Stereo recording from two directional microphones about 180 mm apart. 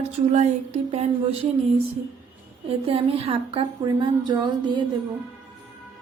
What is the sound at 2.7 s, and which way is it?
A woman's voice, 30° right (ahead or behind).